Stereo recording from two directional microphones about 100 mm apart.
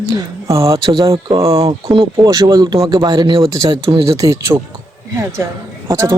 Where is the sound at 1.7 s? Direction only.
60° right (ahead or behind).